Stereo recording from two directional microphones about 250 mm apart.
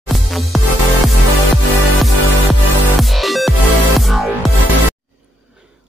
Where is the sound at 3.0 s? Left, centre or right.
Centre.